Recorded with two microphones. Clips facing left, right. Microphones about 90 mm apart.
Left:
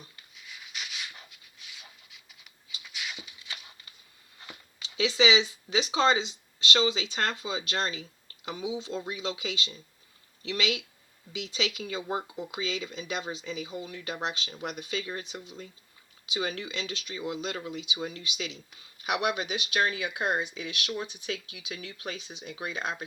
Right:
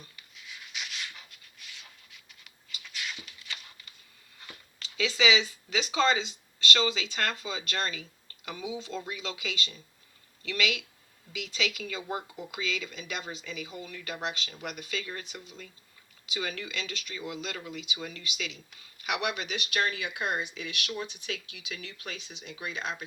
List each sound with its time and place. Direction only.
0.3 s a sound: 5° left (ahead or behind)
1.8 s patter: 5° left (ahead or behind)
4.9 s speech: 30° left (ahead or behind)